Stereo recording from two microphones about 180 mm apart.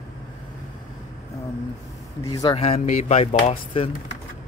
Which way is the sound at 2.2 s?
20° left (ahead or behind).